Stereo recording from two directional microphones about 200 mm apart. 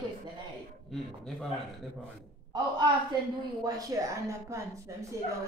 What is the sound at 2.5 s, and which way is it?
A woman's voice, 20° right (ahead or behind).